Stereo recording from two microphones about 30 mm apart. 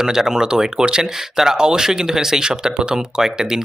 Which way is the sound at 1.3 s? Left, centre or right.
Centre.